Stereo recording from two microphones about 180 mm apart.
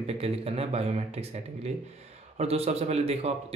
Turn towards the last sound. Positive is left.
turn(degrees=-35)  # may be behind; listen again after turning